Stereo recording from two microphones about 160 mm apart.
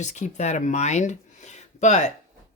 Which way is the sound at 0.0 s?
45° left (ahead or behind).